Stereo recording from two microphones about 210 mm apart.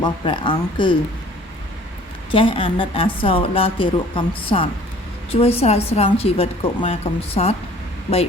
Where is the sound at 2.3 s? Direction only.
25° left (ahead or behind).